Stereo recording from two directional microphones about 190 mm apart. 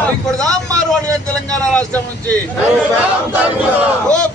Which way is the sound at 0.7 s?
20° right (ahead or behind).